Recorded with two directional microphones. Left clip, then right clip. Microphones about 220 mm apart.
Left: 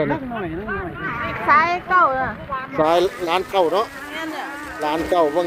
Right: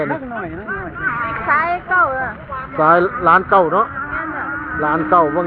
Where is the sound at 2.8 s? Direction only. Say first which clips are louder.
Right 5 dB; 15° left (ahead or behind).